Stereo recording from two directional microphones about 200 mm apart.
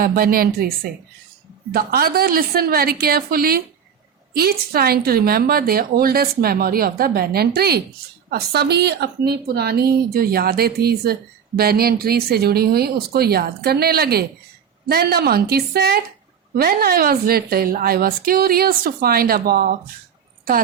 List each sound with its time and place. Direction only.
0.0 s a woman's voice: 50° right (ahead or behind)
1.7 s a woman's voice: 50° right (ahead or behind)